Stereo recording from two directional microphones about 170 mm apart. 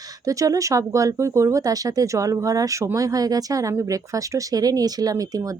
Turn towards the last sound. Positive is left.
turn(degrees=-20)  # may be behind; listen again after turning